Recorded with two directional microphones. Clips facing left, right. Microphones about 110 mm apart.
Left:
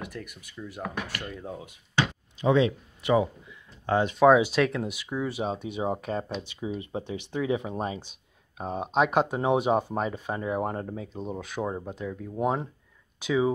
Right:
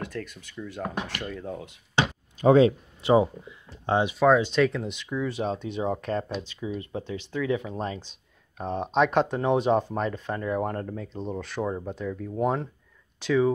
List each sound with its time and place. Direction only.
0.0 s speech: 15° left (ahead or behind)
2.4 s speech: 40° right (ahead or behind)
3.0 s speech: 30° right (ahead or behind)
4.2 s speech: 10° left (ahead or behind)